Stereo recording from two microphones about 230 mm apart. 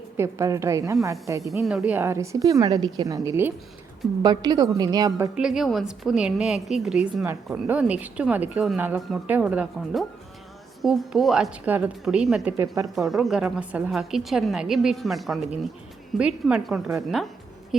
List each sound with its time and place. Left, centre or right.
0.2 s a woman's voice: centre
5.4 s a woman's voice: centre
13.0 s a woman's voice: centre